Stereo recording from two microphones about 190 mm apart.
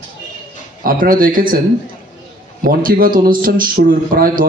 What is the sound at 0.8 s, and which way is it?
Speech, 50° right (ahead or behind).